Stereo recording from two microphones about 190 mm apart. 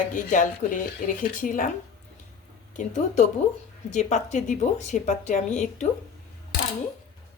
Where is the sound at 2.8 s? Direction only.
40° left (ahead or behind).